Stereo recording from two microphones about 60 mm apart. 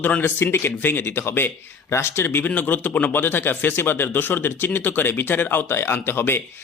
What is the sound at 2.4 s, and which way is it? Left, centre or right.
Speech, left.